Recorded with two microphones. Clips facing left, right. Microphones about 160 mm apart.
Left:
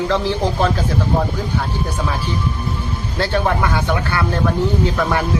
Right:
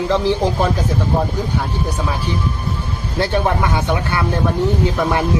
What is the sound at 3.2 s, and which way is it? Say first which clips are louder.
A man's voice: right 1 dB; 20° right (ahead or behind).